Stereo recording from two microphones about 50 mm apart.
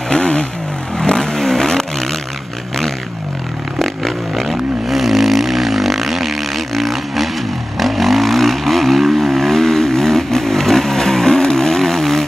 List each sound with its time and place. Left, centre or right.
0.1 s vehicle: centre
3.8 s vehicle: centre